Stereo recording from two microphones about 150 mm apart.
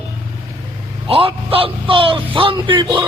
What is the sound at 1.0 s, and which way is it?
A man's voice, 40° right (ahead or behind).